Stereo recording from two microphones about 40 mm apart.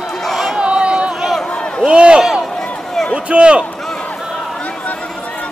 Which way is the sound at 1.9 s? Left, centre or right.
Right.